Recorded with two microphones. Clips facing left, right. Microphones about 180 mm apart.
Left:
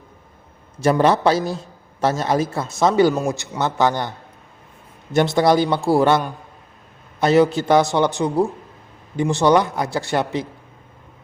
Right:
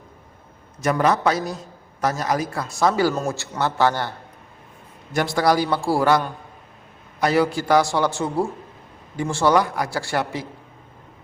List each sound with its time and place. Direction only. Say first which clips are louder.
0.8 s a man's voice: left 4 dB; 30° left (ahead or behind)
5.1 s a man's voice: left 4 dB; 20° left (ahead or behind)